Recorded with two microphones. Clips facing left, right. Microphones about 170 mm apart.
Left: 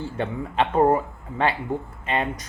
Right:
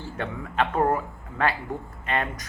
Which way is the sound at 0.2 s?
30° left (ahead or behind).